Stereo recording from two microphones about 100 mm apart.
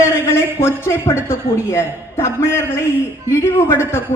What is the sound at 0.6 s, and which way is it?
A woman's voice, 25° left (ahead or behind).